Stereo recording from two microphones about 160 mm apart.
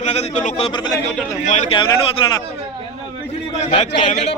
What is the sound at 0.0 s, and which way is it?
Speech, 45° left (ahead or behind).